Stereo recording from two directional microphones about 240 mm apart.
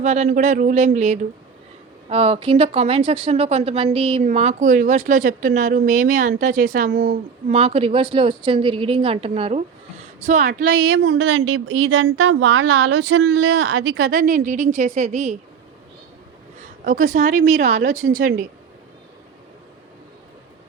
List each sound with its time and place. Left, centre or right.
0.0 s a woman's voice: right
10.8 s speech: right
12.1 s speech: right
13.1 s speech: right
13.8 s a woman's voice: right
16.6 s a woman's voice: right